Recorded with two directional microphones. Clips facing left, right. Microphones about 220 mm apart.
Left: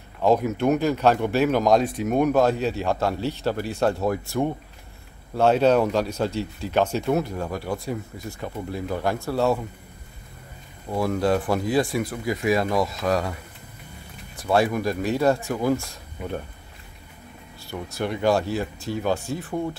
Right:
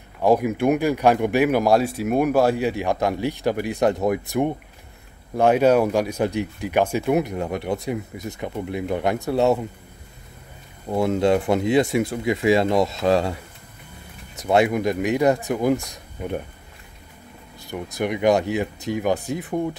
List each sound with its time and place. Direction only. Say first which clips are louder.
0.2 s speech: right 2 dB; 10° right (ahead or behind)
10.9 s speech: right 3 dB; 25° right (ahead or behind)
14.4 s speech: right 3 dB; 20° right (ahead or behind)
17.6 s speech: right 3 dB; 15° right (ahead or behind)